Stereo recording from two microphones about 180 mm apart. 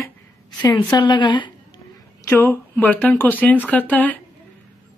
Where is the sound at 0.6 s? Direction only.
20° left (ahead or behind).